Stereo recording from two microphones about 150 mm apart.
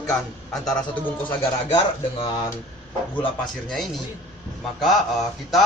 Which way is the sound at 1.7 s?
35° left (ahead or behind).